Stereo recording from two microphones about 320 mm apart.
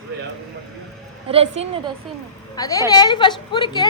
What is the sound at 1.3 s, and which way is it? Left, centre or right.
Speech, centre.